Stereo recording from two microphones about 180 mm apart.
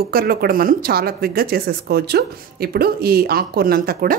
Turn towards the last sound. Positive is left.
turn(degrees=-55)  # may be behind; listen again after turning